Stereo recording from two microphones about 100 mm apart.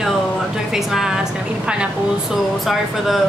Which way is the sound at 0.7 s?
Centre (ahead or behind).